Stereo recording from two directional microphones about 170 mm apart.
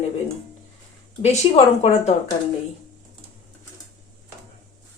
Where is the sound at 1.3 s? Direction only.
40° left (ahead or behind).